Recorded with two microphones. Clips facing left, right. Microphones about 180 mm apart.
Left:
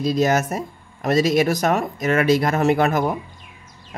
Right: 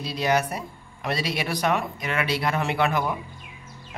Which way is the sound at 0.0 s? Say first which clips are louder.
Left 5 dB; 45° left (ahead or behind).